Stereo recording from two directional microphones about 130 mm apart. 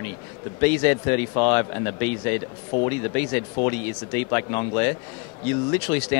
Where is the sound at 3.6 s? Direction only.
25° left (ahead or behind).